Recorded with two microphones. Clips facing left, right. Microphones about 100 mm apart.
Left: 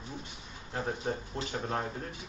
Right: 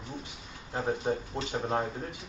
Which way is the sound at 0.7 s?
20° right (ahead or behind).